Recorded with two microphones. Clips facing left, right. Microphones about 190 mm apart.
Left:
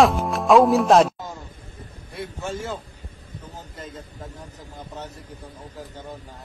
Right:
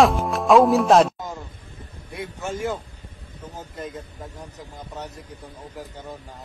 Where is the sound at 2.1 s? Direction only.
15° right (ahead or behind).